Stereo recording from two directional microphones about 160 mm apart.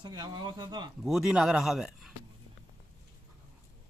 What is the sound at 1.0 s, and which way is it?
Speech, 5° right (ahead or behind).